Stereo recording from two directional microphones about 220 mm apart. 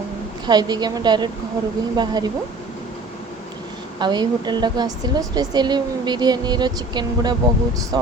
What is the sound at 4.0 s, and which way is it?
A woman's voice, 20° right (ahead or behind).